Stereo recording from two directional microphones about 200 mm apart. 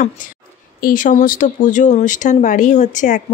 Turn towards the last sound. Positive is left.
turn(degrees=40)  # may be behind; listen again after turning